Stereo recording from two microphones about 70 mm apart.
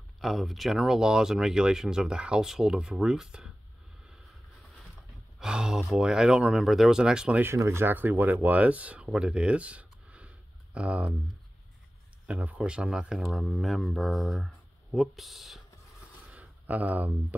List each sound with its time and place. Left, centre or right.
0.2 s speech: centre
5.4 s speech: centre
7.4 s speech: right
7.9 s speech: right
12.3 s speech: centre
16.3 s a sound: right